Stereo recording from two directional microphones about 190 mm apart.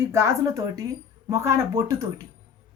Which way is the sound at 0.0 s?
15° right (ahead or behind).